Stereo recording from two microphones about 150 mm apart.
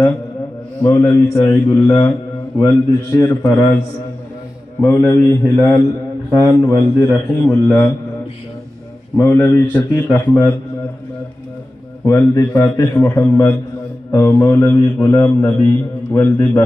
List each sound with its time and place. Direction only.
0.8 s a man's voice: 20° left (ahead or behind)
4.7 s a man's voice: 15° left (ahead or behind)
9.1 s a man's voice: 15° left (ahead or behind)
12.0 s a man's voice: 20° left (ahead or behind)